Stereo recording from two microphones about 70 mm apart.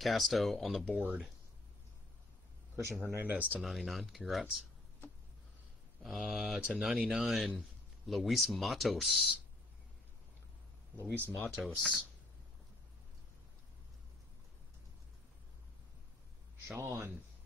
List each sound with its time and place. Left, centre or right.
0.0 s speech: centre
2.7 s a man's voice: right
3.6 s speech: centre
6.2 s speech: centre
11.1 s speech: left
11.5 s speech: centre
16.6 s a man's voice: right